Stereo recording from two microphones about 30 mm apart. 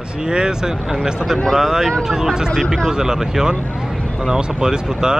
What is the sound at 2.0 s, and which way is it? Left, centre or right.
Speech, centre.